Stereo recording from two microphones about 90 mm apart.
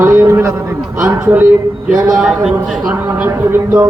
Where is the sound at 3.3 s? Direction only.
45° right (ahead or behind).